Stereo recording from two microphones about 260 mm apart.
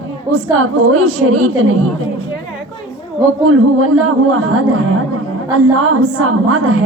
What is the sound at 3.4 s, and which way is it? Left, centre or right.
A woman's voice, right.